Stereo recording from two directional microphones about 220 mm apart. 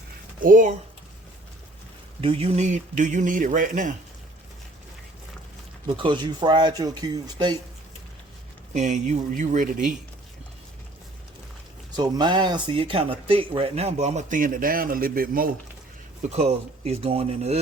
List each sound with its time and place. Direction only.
0.4 s speech: 35° right (ahead or behind)
2.2 s speech: 25° right (ahead or behind)
6.0 s speech: 20° right (ahead or behind)
8.7 s speech: 30° right (ahead or behind)
11.9 s speech: 20° right (ahead or behind); by 15.4 s 40° right (ahead or behind)
16.3 s speech: 30° right (ahead or behind)